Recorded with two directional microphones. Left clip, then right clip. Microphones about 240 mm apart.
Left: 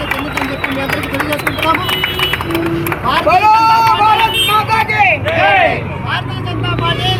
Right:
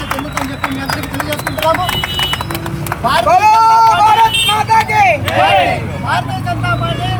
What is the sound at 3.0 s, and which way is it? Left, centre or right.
Speech, centre.